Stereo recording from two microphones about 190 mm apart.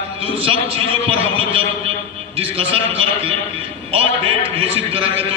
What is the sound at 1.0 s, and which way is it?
A man's voice, 30° right (ahead or behind).